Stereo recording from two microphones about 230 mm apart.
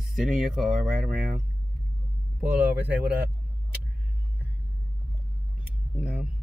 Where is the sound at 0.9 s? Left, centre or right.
Right.